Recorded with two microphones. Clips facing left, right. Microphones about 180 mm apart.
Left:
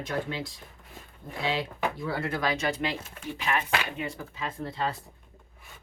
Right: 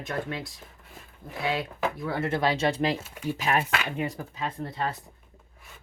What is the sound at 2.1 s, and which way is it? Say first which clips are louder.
Speech: right 3 dB; 25° right (ahead or behind).